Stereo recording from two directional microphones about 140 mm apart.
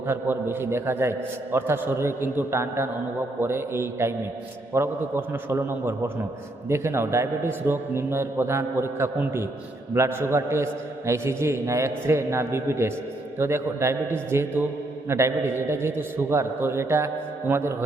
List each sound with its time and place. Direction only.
0.1 s a man's voice: 15° right (ahead or behind)